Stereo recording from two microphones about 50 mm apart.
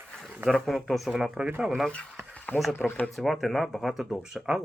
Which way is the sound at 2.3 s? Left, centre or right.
Left.